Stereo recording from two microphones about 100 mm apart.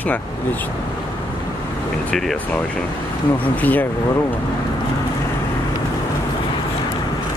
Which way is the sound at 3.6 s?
15° left (ahead or behind).